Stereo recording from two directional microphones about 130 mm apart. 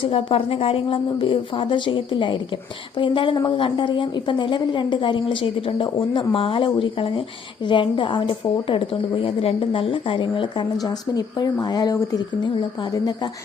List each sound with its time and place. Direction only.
0.0 s a woman's voice: 45° left (ahead or behind); by 12.5 s 30° left (ahead or behind)